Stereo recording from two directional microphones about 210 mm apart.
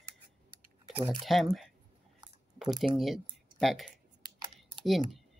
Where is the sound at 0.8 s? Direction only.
25° right (ahead or behind).